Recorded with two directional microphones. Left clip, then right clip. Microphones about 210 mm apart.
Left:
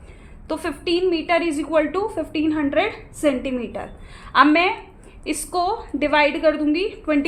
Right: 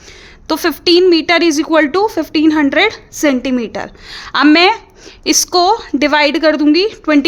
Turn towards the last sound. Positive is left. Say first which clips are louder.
# right 9 dB
turn(degrees=-55)  # may be behind; listen again after turning